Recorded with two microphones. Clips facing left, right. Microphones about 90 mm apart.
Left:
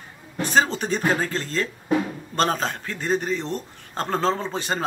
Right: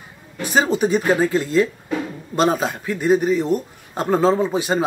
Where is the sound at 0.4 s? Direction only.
10° right (ahead or behind).